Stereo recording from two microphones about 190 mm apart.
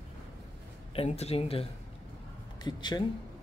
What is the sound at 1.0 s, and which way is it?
Speech, 35° left (ahead or behind).